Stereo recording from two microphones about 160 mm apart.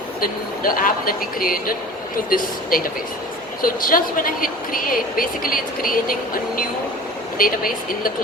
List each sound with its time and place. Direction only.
0.2 s a woman's voice: 60° left (ahead or behind)
7.3 s a woman's voice: 65° left (ahead or behind)